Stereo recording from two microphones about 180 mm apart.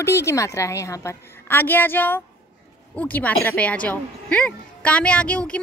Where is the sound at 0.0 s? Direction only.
15° left (ahead or behind).